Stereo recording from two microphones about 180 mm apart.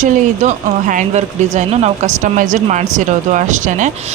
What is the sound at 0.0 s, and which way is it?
Speech, 45° right (ahead or behind).